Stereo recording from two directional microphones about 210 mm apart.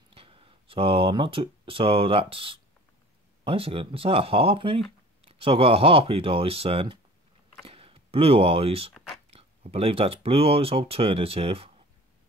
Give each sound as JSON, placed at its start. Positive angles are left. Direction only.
{"t": 0.1, "sound": "speech", "side_deg": -25}